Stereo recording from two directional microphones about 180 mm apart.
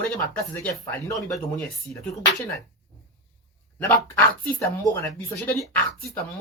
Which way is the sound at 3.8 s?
10° left (ahead or behind).